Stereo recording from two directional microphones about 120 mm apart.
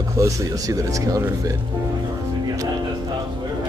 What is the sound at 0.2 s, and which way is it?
A man's voice, 25° right (ahead or behind).